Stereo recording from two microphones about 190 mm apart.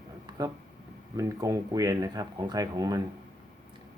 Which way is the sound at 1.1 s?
15° right (ahead or behind).